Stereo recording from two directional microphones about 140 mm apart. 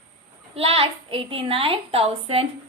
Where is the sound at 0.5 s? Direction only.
45° right (ahead or behind).